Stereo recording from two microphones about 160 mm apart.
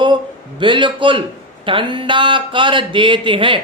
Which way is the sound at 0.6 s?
30° right (ahead or behind).